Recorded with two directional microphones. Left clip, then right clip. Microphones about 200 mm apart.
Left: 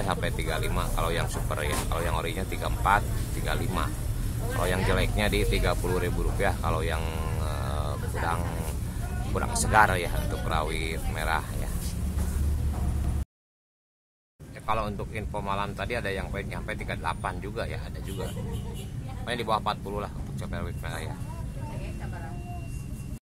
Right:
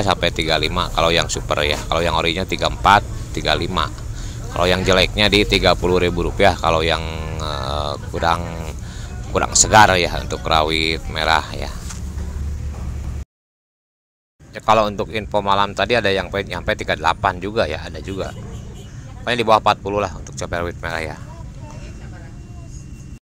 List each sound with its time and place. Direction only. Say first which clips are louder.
0.0 s speech: right 12 dB; 35° right (ahead or behind)
7.0 s speech: right 6 dB; 20° right (ahead or behind)
7.3 s a sound: right 11 dB; 35° right (ahead or behind)
9.3 s speech: right 12 dB; 35° right (ahead or behind)
14.5 s speech: right 14 dB; 35° right (ahead or behind)